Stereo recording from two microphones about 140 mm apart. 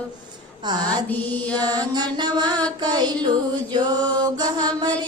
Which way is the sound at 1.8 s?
30° right (ahead or behind).